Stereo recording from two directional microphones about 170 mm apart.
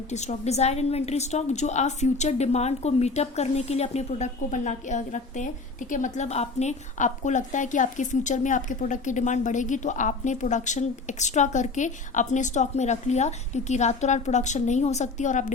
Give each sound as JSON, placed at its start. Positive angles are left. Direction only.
{"t": 0.1, "sound": "a woman's voice", "side_deg": 40}